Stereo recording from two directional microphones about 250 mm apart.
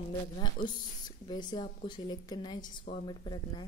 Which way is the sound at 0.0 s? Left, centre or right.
Centre.